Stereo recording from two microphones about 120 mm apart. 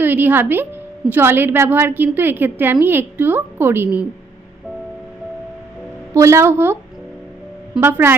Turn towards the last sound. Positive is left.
turn(degrees=-5)  # may be behind; listen again after turning